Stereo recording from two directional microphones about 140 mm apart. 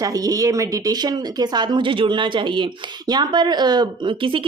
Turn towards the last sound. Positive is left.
turn(degrees=-40)  # may be behind; listen again after turning